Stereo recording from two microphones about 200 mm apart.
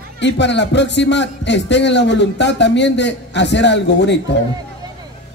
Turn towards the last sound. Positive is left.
turn(degrees=60)  # may be behind; listen again after turning